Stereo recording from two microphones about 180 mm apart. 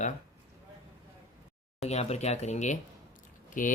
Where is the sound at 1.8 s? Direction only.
35° left (ahead or behind).